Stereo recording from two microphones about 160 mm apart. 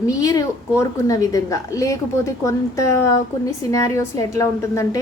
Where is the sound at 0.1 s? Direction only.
20° left (ahead or behind).